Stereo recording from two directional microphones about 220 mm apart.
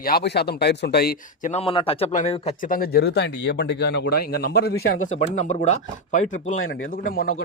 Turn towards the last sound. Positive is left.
turn(degrees=40)  # may be behind; listen again after turning